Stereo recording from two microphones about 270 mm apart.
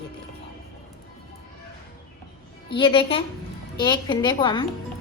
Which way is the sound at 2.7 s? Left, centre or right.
Centre.